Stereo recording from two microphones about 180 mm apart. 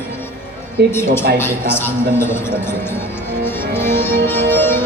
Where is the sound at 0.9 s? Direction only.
15° left (ahead or behind).